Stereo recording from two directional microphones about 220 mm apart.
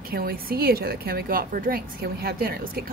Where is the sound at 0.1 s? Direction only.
40° right (ahead or behind).